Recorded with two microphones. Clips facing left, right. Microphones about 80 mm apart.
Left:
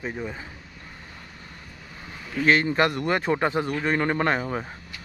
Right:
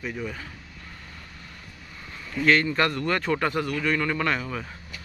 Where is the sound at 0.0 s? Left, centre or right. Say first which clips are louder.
Left 1 dB; left.